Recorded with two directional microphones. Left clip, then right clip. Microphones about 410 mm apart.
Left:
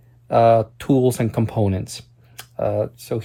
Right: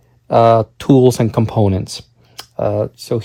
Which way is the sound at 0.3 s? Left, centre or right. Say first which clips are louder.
Right 4 dB; centre.